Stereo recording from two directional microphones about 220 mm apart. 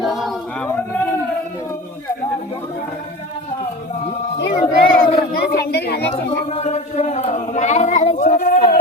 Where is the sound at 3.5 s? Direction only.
30° left (ahead or behind).